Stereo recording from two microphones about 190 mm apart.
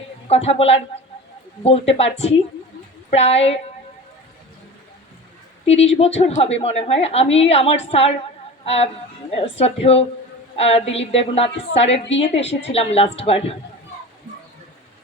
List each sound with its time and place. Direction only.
0.3 s a woman's voice: 35° left (ahead or behind)
5.6 s a woman's voice: 35° left (ahead or behind)